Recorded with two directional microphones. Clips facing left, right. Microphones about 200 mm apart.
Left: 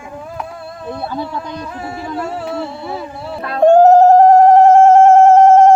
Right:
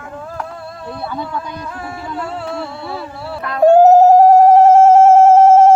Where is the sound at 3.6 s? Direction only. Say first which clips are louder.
Even; 5° right (ahead or behind).